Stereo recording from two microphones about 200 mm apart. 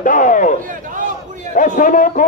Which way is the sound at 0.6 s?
40° right (ahead or behind).